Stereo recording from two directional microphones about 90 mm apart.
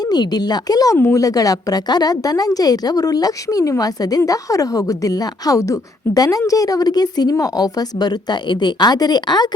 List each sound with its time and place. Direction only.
0.0 s speech: 50° left (ahead or behind)
0.9 s speech: 25° left (ahead or behind)
1.2 s a woman's voice: 40° left (ahead or behind)